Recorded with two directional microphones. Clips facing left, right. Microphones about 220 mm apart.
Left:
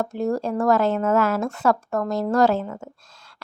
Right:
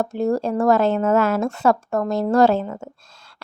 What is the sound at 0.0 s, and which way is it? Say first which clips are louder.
A woman's voice: right 3 dB; 30° right (ahead or behind).